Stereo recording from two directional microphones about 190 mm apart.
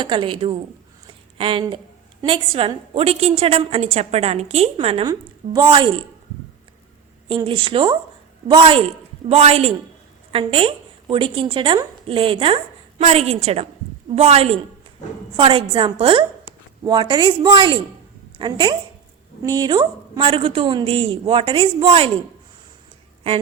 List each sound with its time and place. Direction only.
0.0 s a woman's voice: 25° right (ahead or behind)
7.3 s a woman's voice: 25° right (ahead or behind)